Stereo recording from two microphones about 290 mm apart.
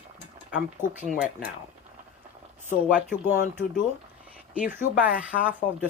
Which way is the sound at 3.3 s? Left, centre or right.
Centre.